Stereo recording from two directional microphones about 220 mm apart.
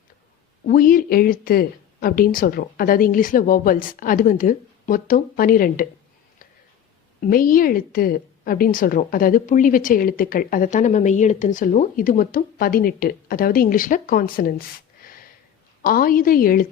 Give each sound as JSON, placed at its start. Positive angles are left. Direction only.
{"t": 0.6, "sound": "a woman's voice", "side_deg": 40}
{"t": 7.3, "sound": "a woman's voice", "side_deg": 40}
{"t": 15.0, "sound": "a sound", "side_deg": 40}
{"t": 15.8, "sound": "a woman's voice", "side_deg": 40}